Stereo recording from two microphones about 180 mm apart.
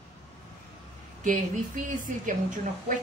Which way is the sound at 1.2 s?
45° right (ahead or behind).